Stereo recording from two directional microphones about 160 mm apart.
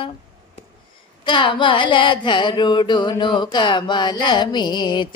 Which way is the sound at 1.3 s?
30° left (ahead or behind).